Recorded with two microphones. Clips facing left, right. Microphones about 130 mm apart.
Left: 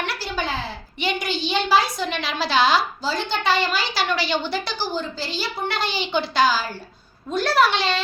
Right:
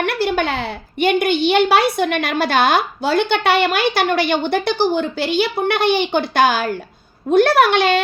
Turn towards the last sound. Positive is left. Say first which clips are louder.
# right 6 dB
turn(degrees=-55)  # may be behind; listen again after turning